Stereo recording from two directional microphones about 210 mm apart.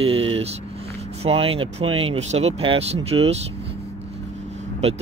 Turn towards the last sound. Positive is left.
turn(degrees=-30)  # may be behind; listen again after turning